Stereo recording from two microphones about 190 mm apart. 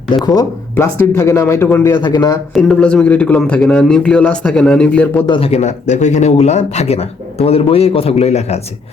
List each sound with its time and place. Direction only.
0.3 s speech: 15° left (ahead or behind)
1.9 s speech: 20° left (ahead or behind)
2.5 s speech: 5° left (ahead or behind)
5.2 s speech: 25° left (ahead or behind)